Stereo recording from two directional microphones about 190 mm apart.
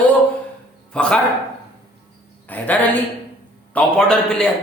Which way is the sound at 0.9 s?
5° left (ahead or behind).